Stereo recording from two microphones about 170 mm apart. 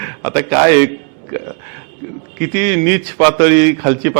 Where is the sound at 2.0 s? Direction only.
20° right (ahead or behind).